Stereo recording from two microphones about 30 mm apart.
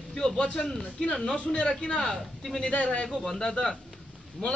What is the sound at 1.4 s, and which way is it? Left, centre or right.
Speech, left.